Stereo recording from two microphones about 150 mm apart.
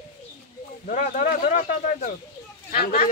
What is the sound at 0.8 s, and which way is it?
Speech, 65° left (ahead or behind).